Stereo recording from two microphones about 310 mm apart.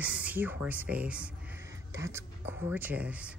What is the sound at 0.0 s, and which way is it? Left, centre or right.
Speech, centre.